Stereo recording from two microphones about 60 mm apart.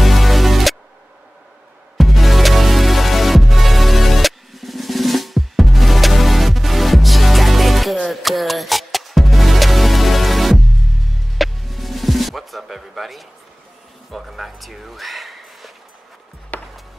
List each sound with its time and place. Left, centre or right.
0.0 s music: centre
2.0 s music: centre
14.1 s a sound: centre
16.5 s music: left